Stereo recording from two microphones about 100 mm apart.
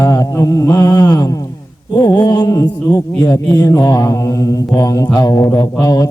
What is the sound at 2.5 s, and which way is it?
Mantra, 35° left (ahead or behind).